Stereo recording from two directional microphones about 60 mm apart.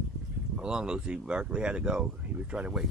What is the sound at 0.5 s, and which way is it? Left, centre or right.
Speech, centre.